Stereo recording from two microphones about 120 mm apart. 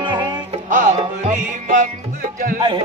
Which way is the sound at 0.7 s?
90° right.